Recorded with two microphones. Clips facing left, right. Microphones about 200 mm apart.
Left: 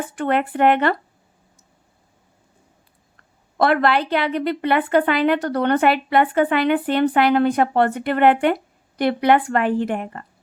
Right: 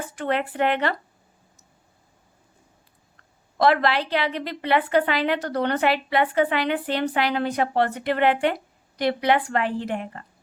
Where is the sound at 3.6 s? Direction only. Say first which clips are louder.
Left 2 dB; 55° left (ahead or behind).